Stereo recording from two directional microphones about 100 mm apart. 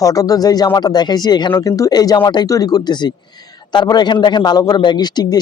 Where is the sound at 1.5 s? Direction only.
35° left (ahead or behind).